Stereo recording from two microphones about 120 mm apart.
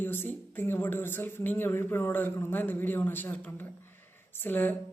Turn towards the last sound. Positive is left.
turn(degrees=15)  # may be behind; listen again after turning